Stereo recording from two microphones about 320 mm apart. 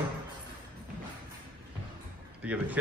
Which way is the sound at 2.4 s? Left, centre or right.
Centre.